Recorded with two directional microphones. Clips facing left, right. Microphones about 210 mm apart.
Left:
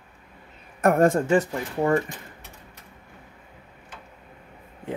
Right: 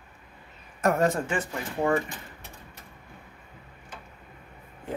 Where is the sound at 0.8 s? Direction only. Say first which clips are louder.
Left 5 dB; 55° left (ahead or behind).